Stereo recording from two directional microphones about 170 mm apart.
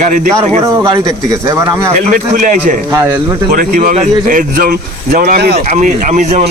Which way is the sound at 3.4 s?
55° right (ahead or behind).